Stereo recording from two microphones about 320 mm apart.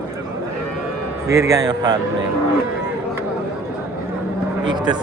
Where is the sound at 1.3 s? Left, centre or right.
Centre.